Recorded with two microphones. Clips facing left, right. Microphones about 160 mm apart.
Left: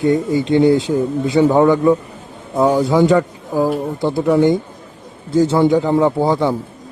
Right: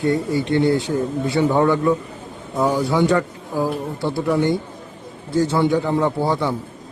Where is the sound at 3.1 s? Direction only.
15° left (ahead or behind).